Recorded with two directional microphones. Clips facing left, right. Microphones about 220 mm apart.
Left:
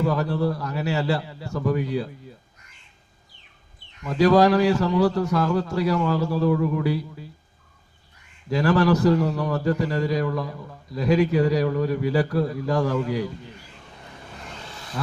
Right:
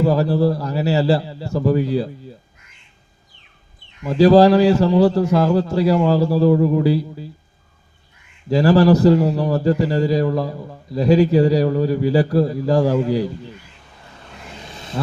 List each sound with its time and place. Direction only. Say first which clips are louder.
0.0 s a man's voice: right 6 dB; 30° right (ahead or behind)
4.0 s a man's voice: right 6 dB; 30° right (ahead or behind)
8.4 s a man's voice: right 6 dB; 30° right (ahead or behind)
14.6 s vehicle: right 4 dB; 20° right (ahead or behind)